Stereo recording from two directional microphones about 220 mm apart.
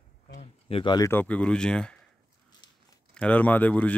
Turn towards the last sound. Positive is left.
turn(degrees=5)  # may be behind; listen again after turning